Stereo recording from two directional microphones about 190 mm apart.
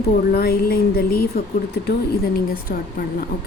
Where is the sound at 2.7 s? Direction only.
50° left (ahead or behind).